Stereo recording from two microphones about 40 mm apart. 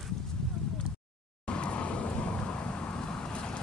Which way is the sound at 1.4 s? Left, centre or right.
Left.